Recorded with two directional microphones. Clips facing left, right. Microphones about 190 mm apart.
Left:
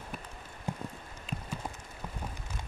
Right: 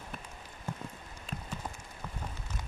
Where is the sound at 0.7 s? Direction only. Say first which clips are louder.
Left 3 dB; 15° left (ahead or behind).